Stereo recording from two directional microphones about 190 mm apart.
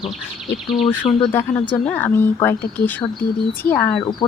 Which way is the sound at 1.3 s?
10° left (ahead or behind).